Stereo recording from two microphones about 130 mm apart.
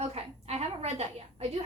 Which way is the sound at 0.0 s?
55° right (ahead or behind).